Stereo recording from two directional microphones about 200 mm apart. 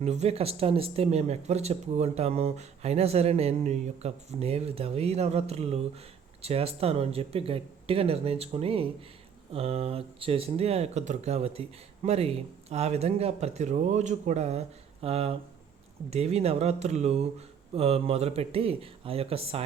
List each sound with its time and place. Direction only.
0.0 s speech: 35° right (ahead or behind)